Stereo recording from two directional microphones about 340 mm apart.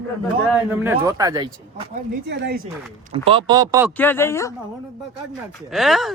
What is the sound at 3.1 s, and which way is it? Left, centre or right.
Speech, centre.